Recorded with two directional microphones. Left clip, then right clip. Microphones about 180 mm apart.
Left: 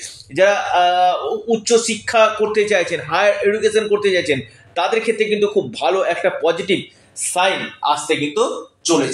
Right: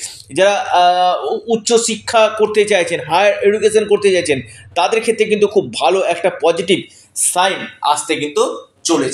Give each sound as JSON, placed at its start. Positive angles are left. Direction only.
{"t": 0.0, "sound": "speech", "side_deg": -35}